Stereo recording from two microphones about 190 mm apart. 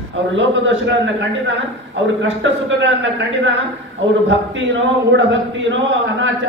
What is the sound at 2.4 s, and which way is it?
A man's voice, 80° right.